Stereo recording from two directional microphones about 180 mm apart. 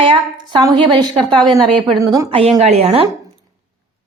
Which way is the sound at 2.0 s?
20° right (ahead or behind).